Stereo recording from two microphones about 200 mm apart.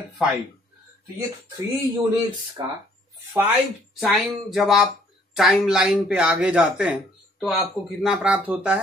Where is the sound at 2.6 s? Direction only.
20° right (ahead or behind).